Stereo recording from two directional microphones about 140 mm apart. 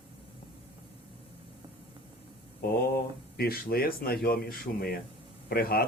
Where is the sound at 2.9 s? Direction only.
90° left.